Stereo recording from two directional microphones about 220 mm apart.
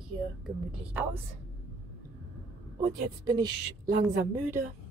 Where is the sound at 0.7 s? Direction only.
5° right (ahead or behind).